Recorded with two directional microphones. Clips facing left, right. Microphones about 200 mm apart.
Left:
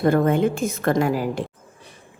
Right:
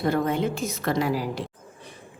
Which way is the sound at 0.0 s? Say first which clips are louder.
Left 6 dB; 50° left (ahead or behind).